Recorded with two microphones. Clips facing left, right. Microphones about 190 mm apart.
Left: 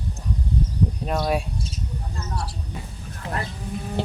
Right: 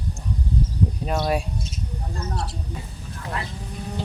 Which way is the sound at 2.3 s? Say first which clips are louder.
Left 1 dB; 25° right (ahead or behind).